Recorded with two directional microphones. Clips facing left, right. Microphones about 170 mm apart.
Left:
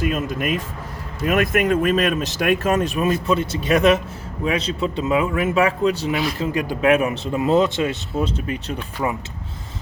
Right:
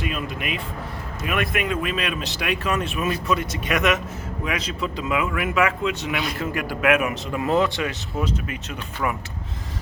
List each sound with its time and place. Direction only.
0.0 s speech: 45° left (ahead or behind)
6.4 s speech: 20° left (ahead or behind)